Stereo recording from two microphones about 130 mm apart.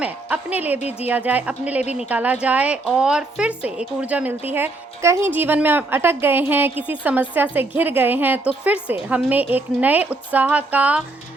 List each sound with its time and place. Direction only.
0.0 s a woman's voice: 10° right (ahead or behind)